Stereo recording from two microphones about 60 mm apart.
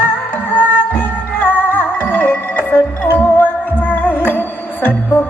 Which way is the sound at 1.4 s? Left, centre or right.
Left.